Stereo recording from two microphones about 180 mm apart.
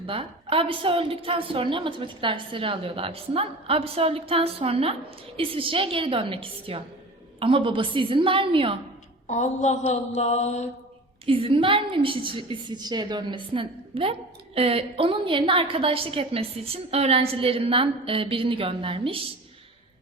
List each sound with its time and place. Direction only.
0.0 s a woman's voice: 30° right (ahead or behind)
9.2 s mantra: 40° left (ahead or behind)
11.3 s a woman's voice: 30° right (ahead or behind)